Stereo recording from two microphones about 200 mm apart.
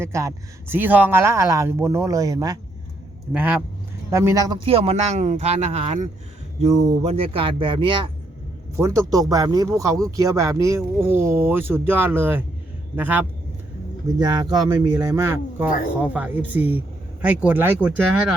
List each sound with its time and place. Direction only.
0.0 s speech: 15° right (ahead or behind)
14.2 s speech: 20° right (ahead or behind)